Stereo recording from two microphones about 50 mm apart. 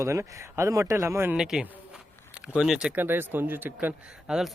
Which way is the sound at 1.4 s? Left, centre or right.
Centre.